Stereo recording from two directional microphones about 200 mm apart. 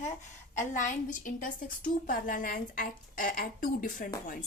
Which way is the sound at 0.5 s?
40° left (ahead or behind).